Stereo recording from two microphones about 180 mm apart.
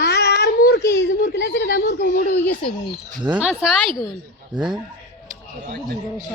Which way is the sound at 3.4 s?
5° right (ahead or behind).